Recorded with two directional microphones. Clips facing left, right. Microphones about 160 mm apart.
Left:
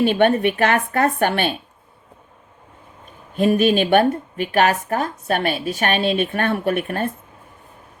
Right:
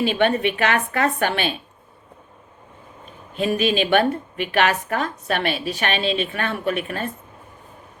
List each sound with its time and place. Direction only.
0.0 s a woman's voice: 50° left (ahead or behind)
3.4 s a woman's voice: 50° left (ahead or behind)